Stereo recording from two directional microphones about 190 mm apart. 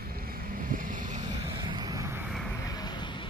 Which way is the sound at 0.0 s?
50° right (ahead or behind).